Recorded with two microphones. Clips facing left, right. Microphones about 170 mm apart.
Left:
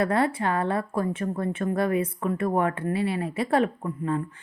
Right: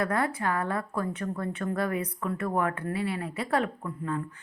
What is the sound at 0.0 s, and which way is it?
A woman's voice, 30° left (ahead or behind).